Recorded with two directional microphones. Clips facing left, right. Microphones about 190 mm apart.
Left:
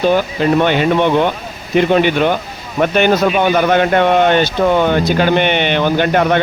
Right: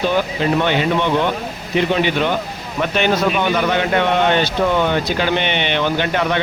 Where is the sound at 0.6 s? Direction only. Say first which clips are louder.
Left 4 dB; 50° left (ahead or behind).